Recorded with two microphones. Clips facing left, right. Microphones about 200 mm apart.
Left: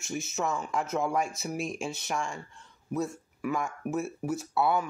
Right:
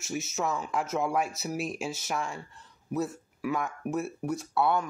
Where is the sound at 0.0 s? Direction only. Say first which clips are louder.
Even; centre (ahead or behind).